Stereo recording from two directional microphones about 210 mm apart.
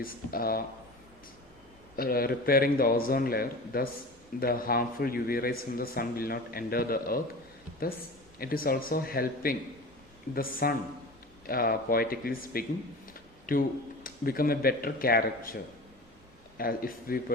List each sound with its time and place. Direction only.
0.0 s speech: 45° left (ahead or behind)
2.0 s speech: 45° left (ahead or behind)
8.4 s speech: 45° left (ahead or behind)
16.6 s speech: 45° left (ahead or behind)